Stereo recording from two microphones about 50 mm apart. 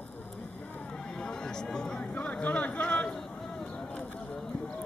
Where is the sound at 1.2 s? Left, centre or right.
Centre.